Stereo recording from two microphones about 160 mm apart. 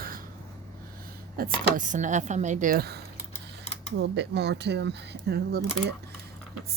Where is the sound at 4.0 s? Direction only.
90° right.